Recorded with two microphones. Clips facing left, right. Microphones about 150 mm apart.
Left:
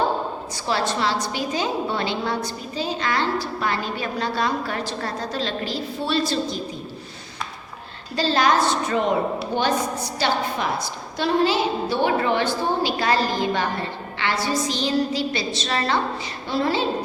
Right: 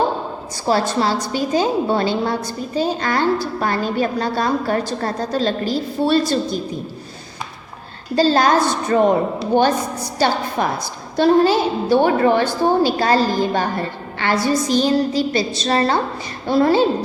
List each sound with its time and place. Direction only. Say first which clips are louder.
0.7 s a woman's voice: right 5 dB; 40° right (ahead or behind)
8.1 s a woman's voice: right 5 dB; 40° right (ahead or behind)
9.5 s a woman's voice: right 7 dB; 50° right (ahead or behind)